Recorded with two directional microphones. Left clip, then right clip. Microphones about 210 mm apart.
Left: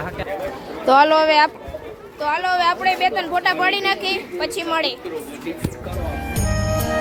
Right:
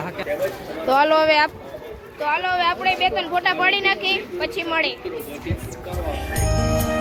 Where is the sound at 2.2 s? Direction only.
10° left (ahead or behind).